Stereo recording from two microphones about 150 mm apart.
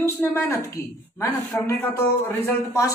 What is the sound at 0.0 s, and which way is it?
A woman's voice, 15° left (ahead or behind).